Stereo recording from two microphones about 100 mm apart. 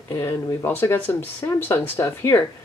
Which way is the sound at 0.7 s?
20° left (ahead or behind).